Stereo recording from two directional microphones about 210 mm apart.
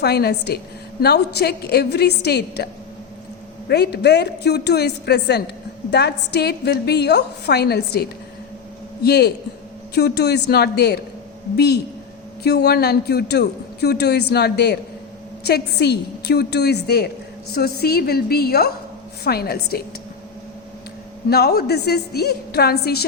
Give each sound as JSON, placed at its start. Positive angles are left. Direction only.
{"t": 0.0, "sound": "a man's voice", "side_deg": 50}
{"t": 3.7, "sound": "a man's voice", "side_deg": 50}
{"t": 9.0, "sound": "a man's voice", "side_deg": 50}
{"t": 21.2, "sound": "a man's voice", "side_deg": 50}